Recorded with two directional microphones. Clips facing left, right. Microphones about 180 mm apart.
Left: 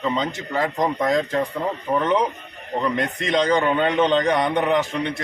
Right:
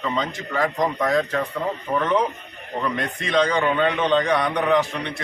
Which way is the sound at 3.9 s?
25° left (ahead or behind).